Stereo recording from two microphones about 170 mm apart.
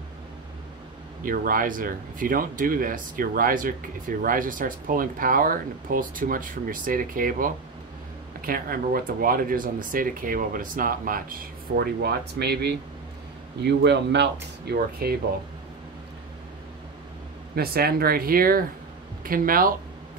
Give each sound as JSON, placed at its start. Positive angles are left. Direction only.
{"t": 1.2, "sound": "speech", "side_deg": -55}
{"t": 17.6, "sound": "speech", "side_deg": -65}